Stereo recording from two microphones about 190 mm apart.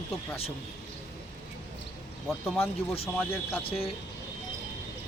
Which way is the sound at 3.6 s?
30° left (ahead or behind).